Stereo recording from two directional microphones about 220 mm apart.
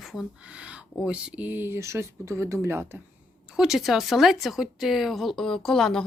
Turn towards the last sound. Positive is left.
turn(degrees=0)  # may be behind; listen again after turning